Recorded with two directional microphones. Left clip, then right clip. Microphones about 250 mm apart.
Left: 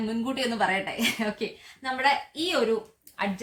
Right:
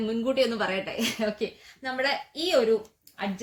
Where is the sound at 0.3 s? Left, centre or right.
Centre.